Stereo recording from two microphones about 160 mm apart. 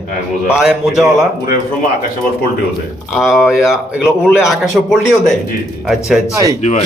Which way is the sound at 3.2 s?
Centre (ahead or behind).